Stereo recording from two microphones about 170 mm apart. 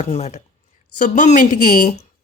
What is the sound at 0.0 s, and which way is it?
Speech, 40° left (ahead or behind).